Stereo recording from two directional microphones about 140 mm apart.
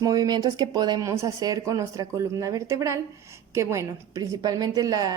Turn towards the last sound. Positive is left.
turn(degrees=-30)  # may be behind; listen again after turning